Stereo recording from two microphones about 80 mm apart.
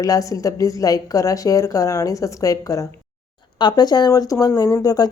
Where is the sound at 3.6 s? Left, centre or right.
Left.